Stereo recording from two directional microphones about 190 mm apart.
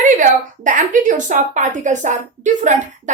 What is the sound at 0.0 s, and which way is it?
A woman's voice, 40° right (ahead or behind).